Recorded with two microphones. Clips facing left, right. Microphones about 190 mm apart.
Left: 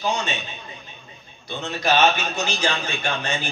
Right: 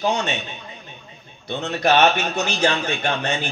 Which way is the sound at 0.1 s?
65° right (ahead or behind).